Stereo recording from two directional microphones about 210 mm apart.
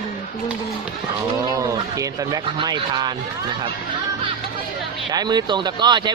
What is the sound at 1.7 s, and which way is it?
Speech, 20° right (ahead or behind).